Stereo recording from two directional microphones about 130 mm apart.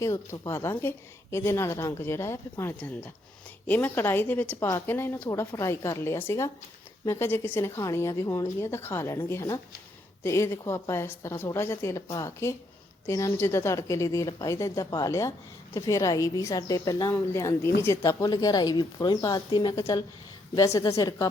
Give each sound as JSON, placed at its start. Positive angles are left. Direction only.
{"t": 0.0, "sound": "a woman's voice", "side_deg": 20}
{"t": 20.7, "sound": "a woman's voice", "side_deg": 25}